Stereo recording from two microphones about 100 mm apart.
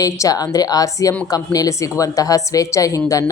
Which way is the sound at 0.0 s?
35° left (ahead or behind).